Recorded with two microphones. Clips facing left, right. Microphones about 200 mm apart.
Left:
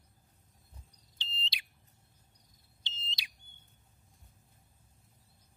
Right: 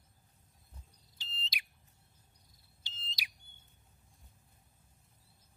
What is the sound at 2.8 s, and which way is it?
Smoke detector, 25° left (ahead or behind).